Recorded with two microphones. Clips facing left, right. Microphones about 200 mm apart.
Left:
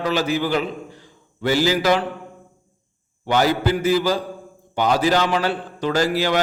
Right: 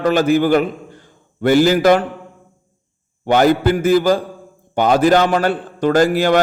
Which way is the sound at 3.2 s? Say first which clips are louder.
Right 6 dB; 50° right (ahead or behind).